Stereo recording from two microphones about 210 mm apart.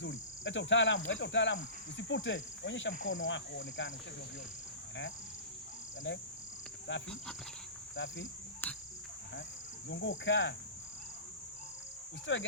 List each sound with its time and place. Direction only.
0.0 s cricket: 65° left (ahead or behind)
6.9 s cricket: 60° left (ahead or behind)
8.6 s cricket: 10° left (ahead or behind)
9.9 s cricket: 60° left (ahead or behind)
12.2 s cricket: 65° left (ahead or behind)